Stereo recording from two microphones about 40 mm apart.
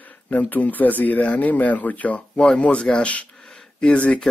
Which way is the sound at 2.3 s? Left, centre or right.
Left.